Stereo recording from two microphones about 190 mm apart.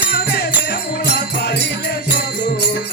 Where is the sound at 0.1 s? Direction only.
60° left (ahead or behind).